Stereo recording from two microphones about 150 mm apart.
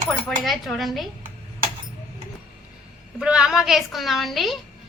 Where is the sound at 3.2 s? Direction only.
5° right (ahead or behind).